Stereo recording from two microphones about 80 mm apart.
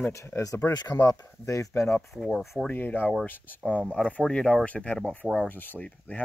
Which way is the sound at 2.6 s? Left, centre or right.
Left.